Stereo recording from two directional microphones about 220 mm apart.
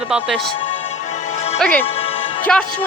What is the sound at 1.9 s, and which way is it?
Music, 25° left (ahead or behind).